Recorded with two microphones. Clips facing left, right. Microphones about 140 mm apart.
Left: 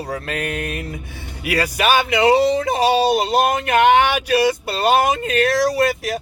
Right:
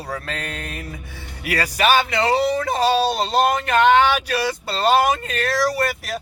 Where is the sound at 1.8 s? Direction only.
15° left (ahead or behind).